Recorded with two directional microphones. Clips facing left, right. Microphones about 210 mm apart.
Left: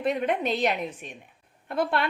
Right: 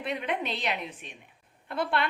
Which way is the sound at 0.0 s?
45° left (ahead or behind).